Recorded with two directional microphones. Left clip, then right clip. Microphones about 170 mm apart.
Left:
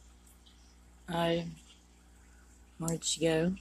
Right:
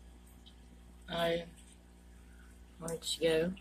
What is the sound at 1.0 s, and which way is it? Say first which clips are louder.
Speech: left 2 dB; 30° left (ahead or behind).